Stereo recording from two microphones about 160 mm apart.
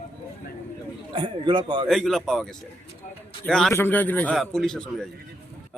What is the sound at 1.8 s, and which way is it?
A man's voice, centre (ahead or behind).